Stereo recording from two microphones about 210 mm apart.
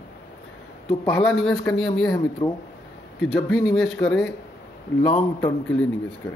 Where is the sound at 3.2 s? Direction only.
Centre (ahead or behind).